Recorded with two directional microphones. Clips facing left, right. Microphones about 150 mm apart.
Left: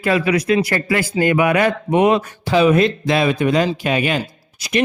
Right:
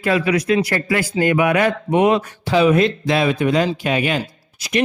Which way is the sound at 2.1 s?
45° left (ahead or behind).